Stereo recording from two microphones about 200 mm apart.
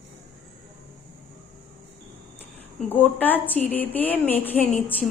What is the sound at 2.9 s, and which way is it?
Speech, 10° left (ahead or behind).